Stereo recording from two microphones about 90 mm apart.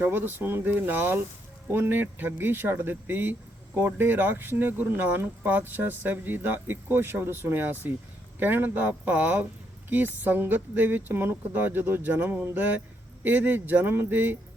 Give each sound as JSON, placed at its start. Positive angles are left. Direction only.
{"t": 0.0, "sound": "speech", "side_deg": -25}